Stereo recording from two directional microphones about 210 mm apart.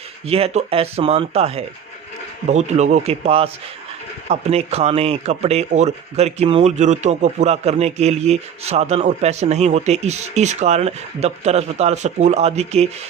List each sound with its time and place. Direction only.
0.3 s speech: 30° right (ahead or behind)